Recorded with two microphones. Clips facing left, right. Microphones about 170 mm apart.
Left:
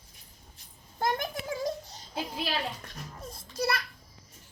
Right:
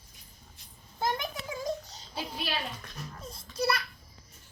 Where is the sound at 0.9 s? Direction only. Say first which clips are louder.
Left 2 dB; 45° left (ahead or behind).